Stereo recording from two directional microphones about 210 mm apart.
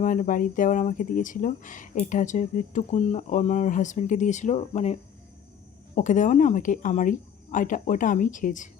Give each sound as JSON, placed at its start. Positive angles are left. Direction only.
{"t": 0.0, "sound": "speech", "side_deg": 40}